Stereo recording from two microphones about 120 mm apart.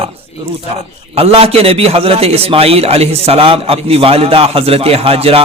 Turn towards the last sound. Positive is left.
turn(degrees=-55)  # may be behind; listen again after turning